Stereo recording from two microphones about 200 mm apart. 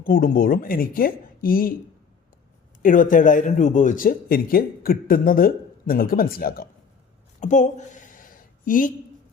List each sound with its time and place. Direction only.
0.0 s speech: 45° left (ahead or behind)
2.8 s speech: 40° left (ahead or behind)
7.3 s a sound: 35° left (ahead or behind)